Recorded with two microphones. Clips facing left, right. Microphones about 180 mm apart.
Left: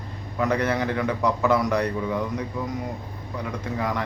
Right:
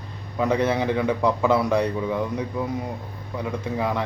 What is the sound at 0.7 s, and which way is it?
Speech, 10° right (ahead or behind).